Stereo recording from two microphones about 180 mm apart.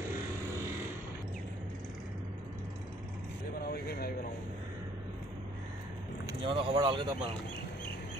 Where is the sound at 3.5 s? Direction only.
60° left (ahead or behind).